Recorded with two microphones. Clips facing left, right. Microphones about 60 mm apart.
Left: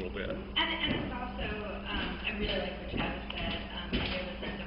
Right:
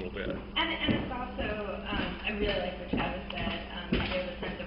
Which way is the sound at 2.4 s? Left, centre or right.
Right.